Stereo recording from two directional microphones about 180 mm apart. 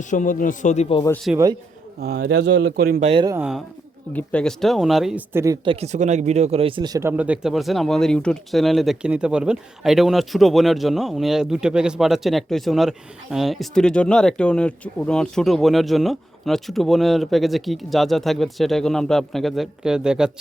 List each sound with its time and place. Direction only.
0.0 s a man's voice: 45° left (ahead or behind)
1.3 s speech: 5° right (ahead or behind)
2.0 s speech: 65° right (ahead or behind)
3.0 s speech: 35° right (ahead or behind)
4.1 s speech: 5° left (ahead or behind)
5.3 s speech: 15° right (ahead or behind)
5.6 s speech: 35° right (ahead or behind); by 20.3 s 5° right (ahead or behind)